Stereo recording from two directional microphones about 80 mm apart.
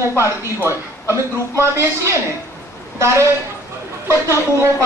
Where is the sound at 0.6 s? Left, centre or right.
Right.